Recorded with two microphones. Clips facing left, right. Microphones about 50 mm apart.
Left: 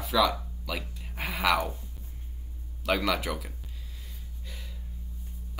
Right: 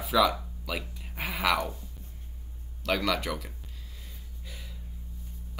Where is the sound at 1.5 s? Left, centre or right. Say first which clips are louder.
Left 1 dB; centre.